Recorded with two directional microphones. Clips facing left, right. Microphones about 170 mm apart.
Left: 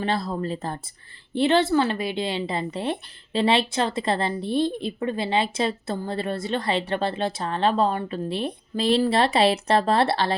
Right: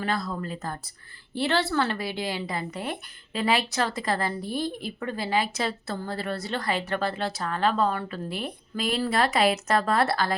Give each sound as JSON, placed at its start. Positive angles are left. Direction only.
{"t": 0.0, "sound": "a woman's voice", "side_deg": 30}